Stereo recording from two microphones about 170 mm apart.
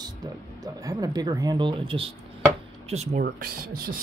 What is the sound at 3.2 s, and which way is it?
Speech, 60° right (ahead or behind).